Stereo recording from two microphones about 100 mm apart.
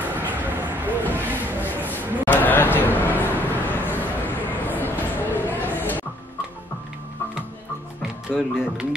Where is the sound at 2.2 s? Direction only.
20° left (ahead or behind).